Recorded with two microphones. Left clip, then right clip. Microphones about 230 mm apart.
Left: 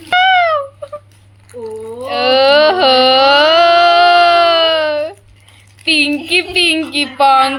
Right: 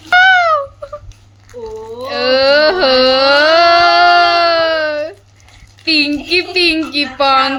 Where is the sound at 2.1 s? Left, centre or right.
Centre.